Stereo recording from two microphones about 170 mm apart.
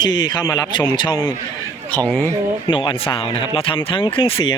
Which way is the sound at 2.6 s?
30° left (ahead or behind).